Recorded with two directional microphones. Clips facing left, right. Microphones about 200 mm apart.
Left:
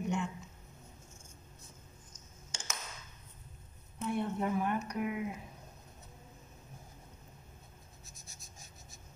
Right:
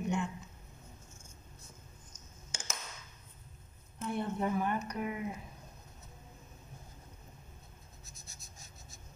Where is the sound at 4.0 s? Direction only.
Centre (ahead or behind).